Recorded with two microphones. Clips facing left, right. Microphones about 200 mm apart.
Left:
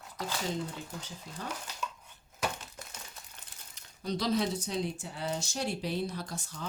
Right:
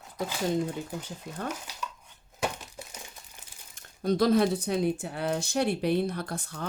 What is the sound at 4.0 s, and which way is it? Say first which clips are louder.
Speech: right 8 dB; 50° right (ahead or behind).